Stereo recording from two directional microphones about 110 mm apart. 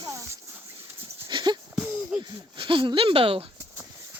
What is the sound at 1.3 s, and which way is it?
Wheeze, 45° right (ahead or behind).